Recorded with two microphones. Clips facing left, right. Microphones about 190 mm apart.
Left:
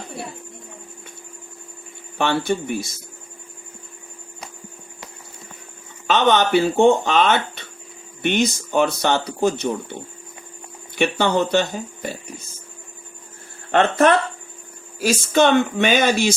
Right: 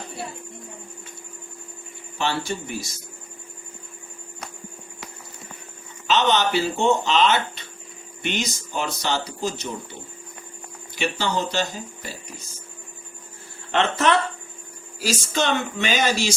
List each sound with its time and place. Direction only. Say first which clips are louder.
2.1 s speech: left 6 dB; 55° left (ahead or behind)
6.1 s speech: left 4 dB; 55° left (ahead or behind)
13.7 s speech: left 5 dB; 50° left (ahead or behind)